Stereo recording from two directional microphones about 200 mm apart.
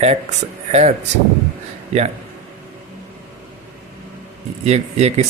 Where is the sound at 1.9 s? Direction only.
35° right (ahead or behind).